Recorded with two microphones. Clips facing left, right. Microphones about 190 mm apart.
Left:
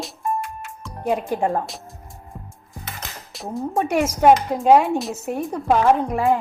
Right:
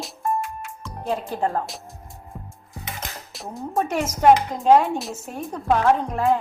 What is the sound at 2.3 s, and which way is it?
Music, centre (ahead or behind).